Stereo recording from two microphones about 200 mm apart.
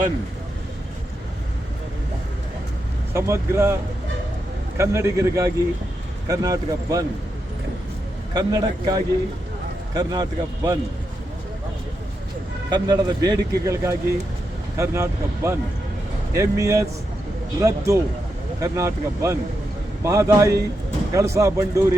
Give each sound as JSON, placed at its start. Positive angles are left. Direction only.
{"t": 3.1, "sound": "speech", "side_deg": -15}
{"t": 4.8, "sound": "speech", "side_deg": -15}
{"t": 8.3, "sound": "speech", "side_deg": -20}
{"t": 12.7, "sound": "speech", "side_deg": -20}